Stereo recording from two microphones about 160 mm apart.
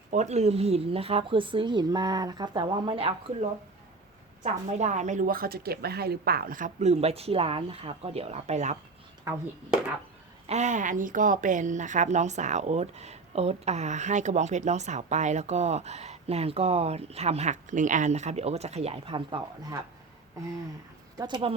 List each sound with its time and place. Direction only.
0.1 s a woman's voice: 45° right (ahead or behind)
4.8 s a woman's voice: 45° right (ahead or behind); by 6.7 s 65° right (ahead or behind)
6.7 s a woman's voice: 40° right (ahead or behind)
10.4 s speech: 45° right (ahead or behind)
21.2 s speech: 30° right (ahead or behind)